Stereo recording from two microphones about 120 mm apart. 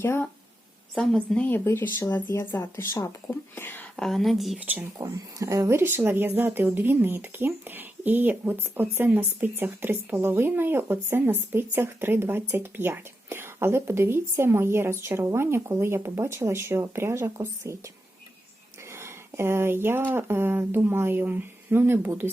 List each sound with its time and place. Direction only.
0.0 s speech: 15° left (ahead or behind)
0.9 s speech: 5° left (ahead or behind)
1.5 s speech: 20° left (ahead or behind)
4.0 s speech: centre (ahead or behind)
4.6 s speech: 15° right (ahead or behind)
4.9 s speech: 25° right (ahead or behind)
18.9 s speech: 20° right (ahead or behind)